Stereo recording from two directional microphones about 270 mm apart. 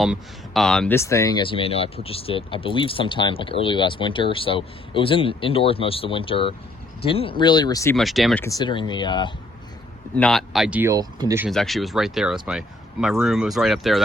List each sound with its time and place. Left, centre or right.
0.0 s speech: centre
7.9 s speech: centre
8.4 s speech: centre
10.2 s speech: centre
11.4 s speech: centre